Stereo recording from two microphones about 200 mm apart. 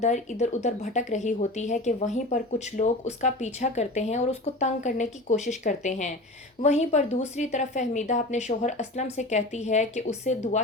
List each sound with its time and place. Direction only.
0.0 s speech: 35° left (ahead or behind)